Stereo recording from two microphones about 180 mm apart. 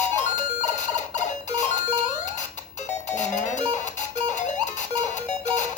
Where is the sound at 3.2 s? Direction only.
40° left (ahead or behind).